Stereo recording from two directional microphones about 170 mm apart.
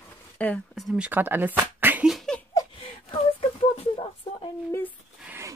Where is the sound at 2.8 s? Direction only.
35° left (ahead or behind).